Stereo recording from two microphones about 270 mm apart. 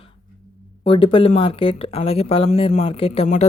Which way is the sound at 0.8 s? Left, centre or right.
Centre.